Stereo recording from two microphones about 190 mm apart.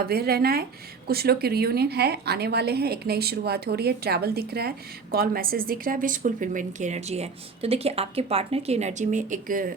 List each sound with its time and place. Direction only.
0.0 s a woman's voice: 55° right (ahead or behind)